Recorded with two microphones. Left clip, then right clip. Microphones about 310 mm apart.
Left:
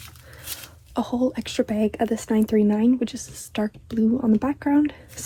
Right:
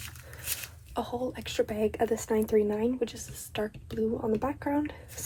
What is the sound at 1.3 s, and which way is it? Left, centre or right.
Speech, centre.